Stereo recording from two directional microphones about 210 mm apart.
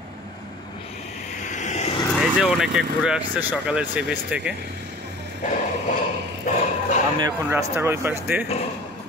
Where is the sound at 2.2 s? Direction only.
5° right (ahead or behind).